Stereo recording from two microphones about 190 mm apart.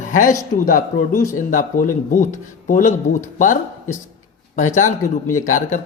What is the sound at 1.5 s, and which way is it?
Speech, 45° left (ahead or behind).